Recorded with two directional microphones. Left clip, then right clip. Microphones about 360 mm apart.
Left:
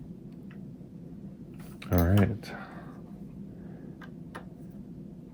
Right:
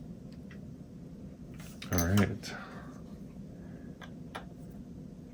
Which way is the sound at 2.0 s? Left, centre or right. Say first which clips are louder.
Left 3 dB; left.